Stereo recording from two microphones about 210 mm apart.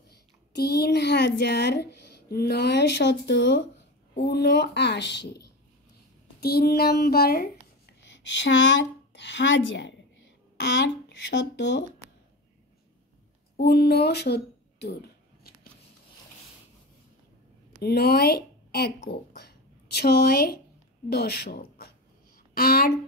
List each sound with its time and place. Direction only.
0.1 s a woman's voice: 50° left (ahead or behind)
8.2 s a woman's voice: 60° left (ahead or behind)
13.6 s speech: 50° left (ahead or behind)
17.7 s speech: 50° left (ahead or behind)
22.5 s a sound: 45° left (ahead or behind)